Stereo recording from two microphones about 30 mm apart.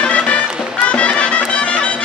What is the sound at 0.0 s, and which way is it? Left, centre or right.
Music, left.